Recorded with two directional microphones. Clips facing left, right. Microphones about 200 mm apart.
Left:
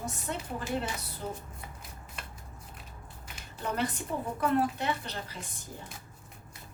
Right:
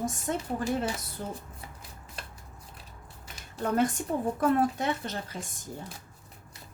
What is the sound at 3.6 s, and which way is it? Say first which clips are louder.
A woman's voice: right 6 dB; 45° right (ahead or behind).